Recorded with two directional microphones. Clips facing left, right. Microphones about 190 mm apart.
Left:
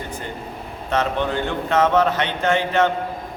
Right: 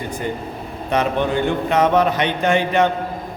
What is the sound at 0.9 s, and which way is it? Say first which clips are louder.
A man's voice: right 2 dB; 15° right (ahead or behind).